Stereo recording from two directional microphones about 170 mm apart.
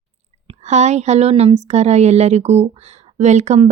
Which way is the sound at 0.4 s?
40° right (ahead or behind).